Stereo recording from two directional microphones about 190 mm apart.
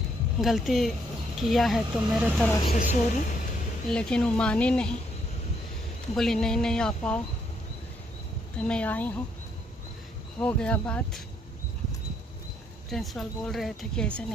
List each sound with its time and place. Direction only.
0.4 s speech: centre (ahead or behind)
2.7 s a woman's voice: 40° left (ahead or behind)
3.9 s speech: 5° left (ahead or behind)
6.1 s speech: centre (ahead or behind)
8.5 s speech: 5° left (ahead or behind)
10.4 s speech: 5° left (ahead or behind)
12.9 s speech: centre (ahead or behind)